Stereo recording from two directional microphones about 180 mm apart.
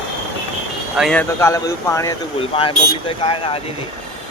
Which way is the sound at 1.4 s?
15° left (ahead or behind).